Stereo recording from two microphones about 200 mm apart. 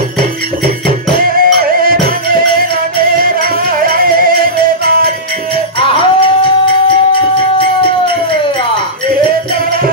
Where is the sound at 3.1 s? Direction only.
45° right (ahead or behind).